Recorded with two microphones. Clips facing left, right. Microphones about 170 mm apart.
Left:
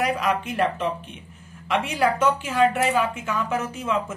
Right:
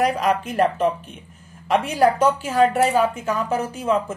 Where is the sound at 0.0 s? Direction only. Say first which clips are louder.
Right 4 dB; 35° right (ahead or behind).